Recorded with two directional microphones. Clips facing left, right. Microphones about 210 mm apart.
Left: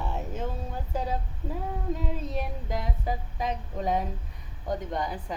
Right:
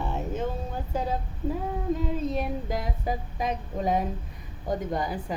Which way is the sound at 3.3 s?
10° right (ahead or behind).